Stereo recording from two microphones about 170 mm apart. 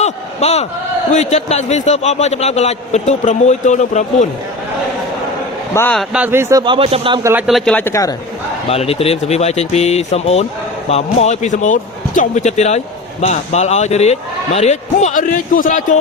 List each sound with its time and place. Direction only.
0.0 s a sound: 40° left (ahead or behind)
1.1 s a man's voice: 40° left (ahead or behind)
5.7 s speech: 10° left (ahead or behind)
6.0 s speech: 10° right (ahead or behind); by 7.2 s 35° right (ahead or behind)
7.2 s speech: 15° right (ahead or behind)
7.4 s speech: centre (ahead or behind)
8.7 s a man's voice: 35° left (ahead or behind)